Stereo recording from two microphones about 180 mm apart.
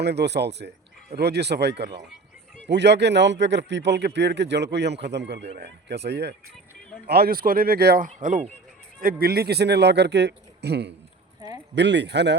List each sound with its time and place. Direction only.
0.0 s a man's voice: 70° right (ahead or behind)